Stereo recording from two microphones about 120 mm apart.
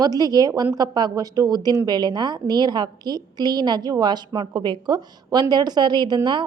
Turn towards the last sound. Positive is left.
turn(degrees=-35)  # may be behind; listen again after turning